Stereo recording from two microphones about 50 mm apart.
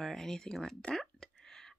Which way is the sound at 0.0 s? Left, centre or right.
Centre.